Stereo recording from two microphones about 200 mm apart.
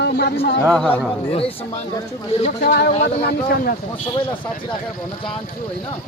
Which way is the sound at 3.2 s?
50° left (ahead or behind).